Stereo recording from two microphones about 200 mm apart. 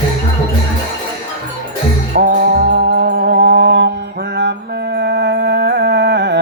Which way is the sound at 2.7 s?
60° right (ahead or behind).